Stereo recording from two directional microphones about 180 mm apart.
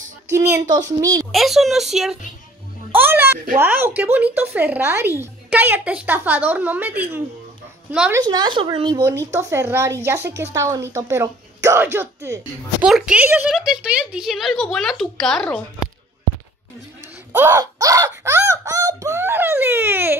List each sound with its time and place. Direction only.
0.3 s speech: 15° right (ahead or behind)
1.3 s a child's voice: centre (ahead or behind)
8.2 s speech: 25° right (ahead or behind); by 15.6 s 5° left (ahead or behind)
17.3 s speech: 10° right (ahead or behind)